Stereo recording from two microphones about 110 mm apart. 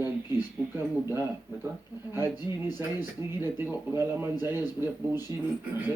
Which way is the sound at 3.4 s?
20° right (ahead or behind).